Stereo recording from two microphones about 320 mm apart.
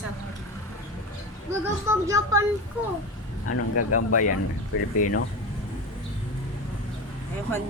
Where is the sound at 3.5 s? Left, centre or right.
Left.